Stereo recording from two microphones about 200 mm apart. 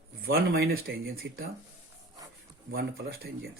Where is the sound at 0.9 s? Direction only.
50° right (ahead or behind).